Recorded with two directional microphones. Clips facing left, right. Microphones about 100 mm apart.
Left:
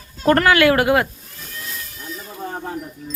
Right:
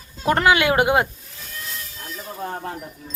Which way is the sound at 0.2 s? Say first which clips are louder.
Left 3 dB; 15° right (ahead or behind).